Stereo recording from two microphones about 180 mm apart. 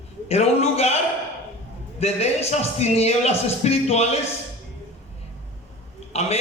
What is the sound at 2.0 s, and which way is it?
A man's voice, 35° left (ahead or behind).